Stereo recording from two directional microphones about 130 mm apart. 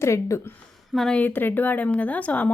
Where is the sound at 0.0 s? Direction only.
20° left (ahead or behind).